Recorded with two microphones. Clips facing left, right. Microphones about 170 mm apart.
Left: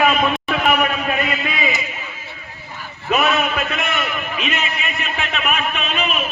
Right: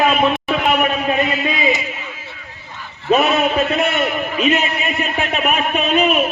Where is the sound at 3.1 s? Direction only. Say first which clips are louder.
Right 4 dB; 30° right (ahead or behind).